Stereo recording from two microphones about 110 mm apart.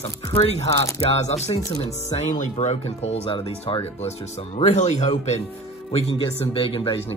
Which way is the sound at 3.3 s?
55° left (ahead or behind).